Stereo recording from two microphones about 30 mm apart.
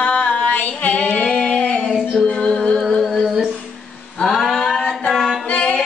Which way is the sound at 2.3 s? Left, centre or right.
Left.